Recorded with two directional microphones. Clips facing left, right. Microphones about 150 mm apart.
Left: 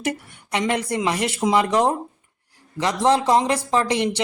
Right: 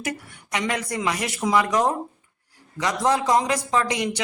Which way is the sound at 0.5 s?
25° left (ahead or behind).